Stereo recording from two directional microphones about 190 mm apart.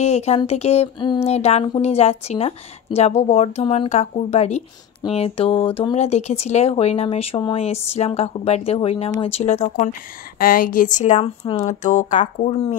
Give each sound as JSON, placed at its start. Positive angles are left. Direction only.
{"t": 0.0, "sound": "speech", "side_deg": 35}
{"t": 10.4, "sound": "speech", "side_deg": 50}